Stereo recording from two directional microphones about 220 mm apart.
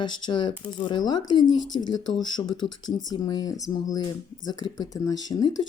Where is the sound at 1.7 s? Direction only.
20° left (ahead or behind).